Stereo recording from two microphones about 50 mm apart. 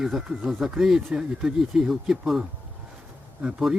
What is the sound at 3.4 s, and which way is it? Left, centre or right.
Speech, centre.